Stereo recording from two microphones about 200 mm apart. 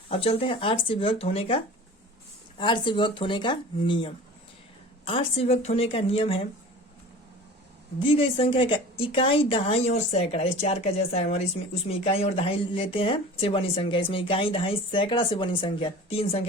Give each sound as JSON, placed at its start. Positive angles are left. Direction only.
{"t": 0.1, "sound": "a woman's voice", "side_deg": 30}
{"t": 8.0, "sound": "a woman's voice", "side_deg": 25}